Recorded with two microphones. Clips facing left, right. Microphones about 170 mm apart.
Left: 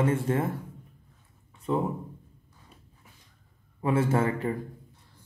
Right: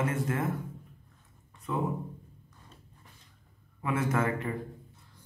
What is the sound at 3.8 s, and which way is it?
Speech, 30° left (ahead or behind).